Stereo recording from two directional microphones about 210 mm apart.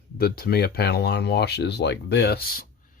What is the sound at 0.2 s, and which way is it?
Speech, 50° left (ahead or behind).